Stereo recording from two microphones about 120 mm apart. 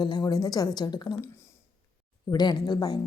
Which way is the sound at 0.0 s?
35° left (ahead or behind).